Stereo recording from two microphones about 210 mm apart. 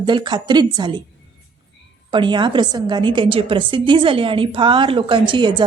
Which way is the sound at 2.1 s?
20° right (ahead or behind).